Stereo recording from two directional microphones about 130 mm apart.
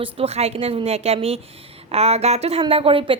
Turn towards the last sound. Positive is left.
turn(degrees=-45)  # may be behind; listen again after turning